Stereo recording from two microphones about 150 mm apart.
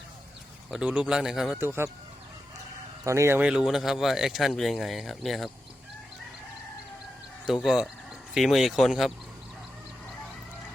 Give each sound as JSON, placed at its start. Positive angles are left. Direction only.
{"t": 0.7, "sound": "speech", "side_deg": -10}
{"t": 1.5, "sound": "speech", "side_deg": -15}
{"t": 3.0, "sound": "speech", "side_deg": -20}
{"t": 7.4, "sound": "speech", "side_deg": 0}